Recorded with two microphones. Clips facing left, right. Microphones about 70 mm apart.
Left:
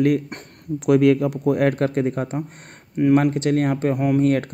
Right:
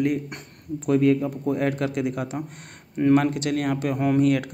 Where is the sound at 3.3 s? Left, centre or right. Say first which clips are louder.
Left 5 dB; left.